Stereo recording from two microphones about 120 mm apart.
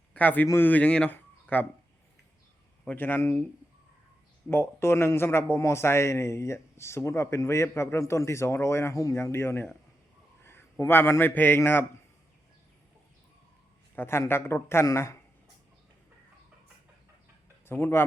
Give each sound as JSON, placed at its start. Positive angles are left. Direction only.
{"t": 0.1, "sound": "a man's voice", "side_deg": 15}
{"t": 2.8, "sound": "speech", "side_deg": 15}
{"t": 4.4, "sound": "a man's voice", "side_deg": 20}
{"t": 13.9, "sound": "a man's voice", "side_deg": 20}
{"t": 17.7, "sound": "a man's voice", "side_deg": 20}